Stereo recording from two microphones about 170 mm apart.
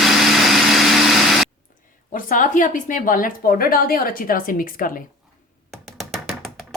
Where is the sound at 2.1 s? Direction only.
50° left (ahead or behind).